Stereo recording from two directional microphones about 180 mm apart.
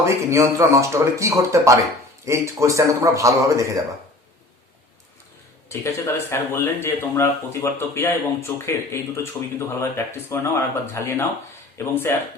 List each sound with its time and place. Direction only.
0.0 s speech: 15° right (ahead or behind)
5.6 s speech: 15° left (ahead or behind)